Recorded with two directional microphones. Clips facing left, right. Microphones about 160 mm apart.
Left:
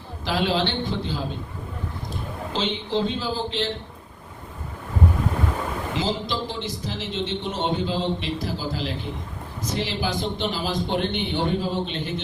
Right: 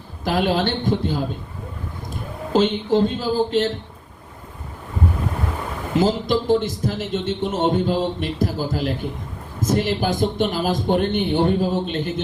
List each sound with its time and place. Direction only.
0.3 s a man's voice: 50° right (ahead or behind)
2.5 s a man's voice: 50° right (ahead or behind)
5.9 s a man's voice: 50° right (ahead or behind)